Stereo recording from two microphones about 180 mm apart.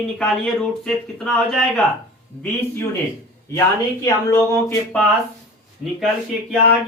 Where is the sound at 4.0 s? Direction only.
15° left (ahead or behind).